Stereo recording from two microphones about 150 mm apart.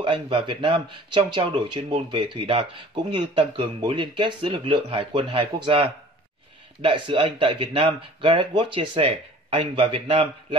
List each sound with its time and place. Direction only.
0.0 s speech: 30° right (ahead or behind)